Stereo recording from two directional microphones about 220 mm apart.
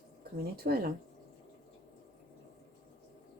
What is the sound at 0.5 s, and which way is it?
Speech, 45° right (ahead or behind).